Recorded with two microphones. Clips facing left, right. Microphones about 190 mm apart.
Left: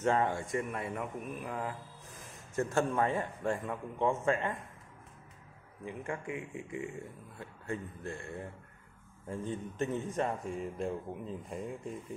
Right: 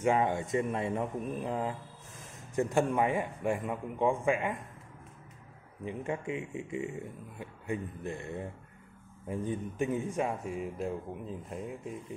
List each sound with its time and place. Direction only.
0.0 s speech: 10° right (ahead or behind)
5.9 s speech: 20° right (ahead or behind); by 12.0 s centre (ahead or behind)